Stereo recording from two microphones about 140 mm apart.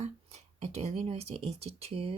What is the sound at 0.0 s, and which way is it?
Speech, 50° right (ahead or behind).